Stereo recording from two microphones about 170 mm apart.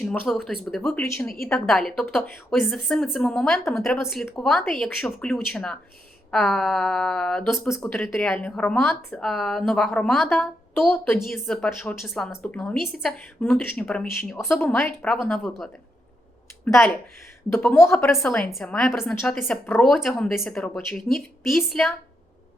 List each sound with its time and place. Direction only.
0.0 s speech: 5° left (ahead or behind)
1.0 s a woman's voice: 15° left (ahead or behind)
1.5 s a woman's voice: 5° left (ahead or behind)
17.5 s a woman's voice: 10° left (ahead or behind)
18.2 s speech: 5° left (ahead or behind)
20.3 s a woman's voice: 15° left (ahead or behind)
20.6 s speech: centre (ahead or behind)